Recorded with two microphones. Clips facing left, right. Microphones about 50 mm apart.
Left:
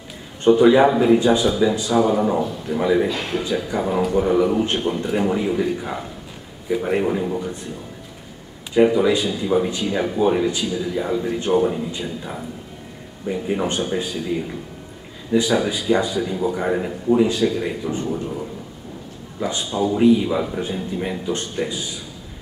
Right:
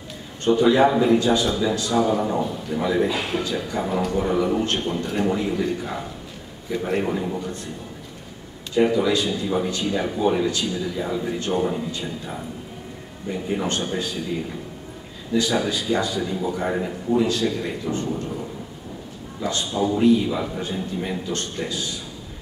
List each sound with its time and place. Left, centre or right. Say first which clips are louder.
0.4 s a man's voice: left 4 dB; centre
3.1 s a man's voice: left 1 dB; centre
3.4 s a man's voice: left 3 dB; centre
8.7 s a man's voice: left 3 dB; centre
13.3 s a man's voice: left 3 dB; centre
15.5 s a man's voice: left 3 dB; centre
19.4 s a man's voice: left 1 dB; centre